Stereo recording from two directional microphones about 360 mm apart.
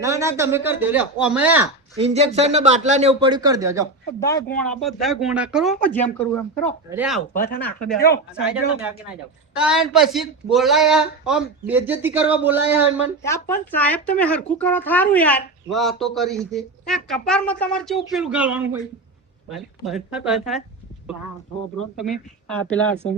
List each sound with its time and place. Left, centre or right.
0.0 s speech: centre
2.0 s speech: centre
4.2 s a man's voice: centre
7.3 s speech: left
7.6 s speech: centre
13.2 s speech: centre
21.9 s speech: centre